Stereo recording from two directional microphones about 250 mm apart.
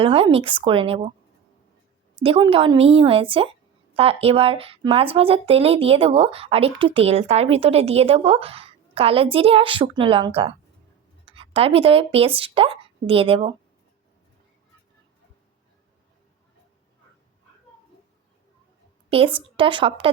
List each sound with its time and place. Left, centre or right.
0.0 s speech: right
2.2 s speech: right
19.1 s speech: right